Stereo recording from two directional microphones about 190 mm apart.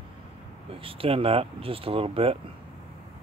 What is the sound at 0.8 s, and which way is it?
Speech, 30° right (ahead or behind).